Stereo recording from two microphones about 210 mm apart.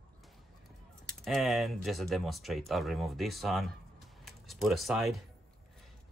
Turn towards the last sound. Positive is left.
turn(degrees=0)  # may be behind; listen again after turning